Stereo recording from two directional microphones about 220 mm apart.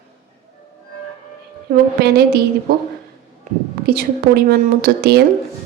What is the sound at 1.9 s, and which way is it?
Speech, 45° right (ahead or behind).